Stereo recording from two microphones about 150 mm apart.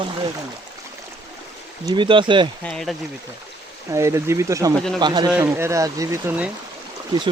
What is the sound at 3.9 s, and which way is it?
Speech, 20° right (ahead or behind).